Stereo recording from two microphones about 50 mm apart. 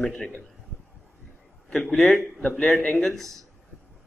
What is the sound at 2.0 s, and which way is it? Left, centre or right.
Speech, centre.